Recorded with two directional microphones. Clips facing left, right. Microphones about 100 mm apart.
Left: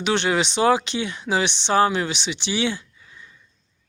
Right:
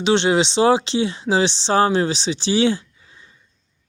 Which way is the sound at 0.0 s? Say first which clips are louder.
Right 4 dB; 25° right (ahead or behind).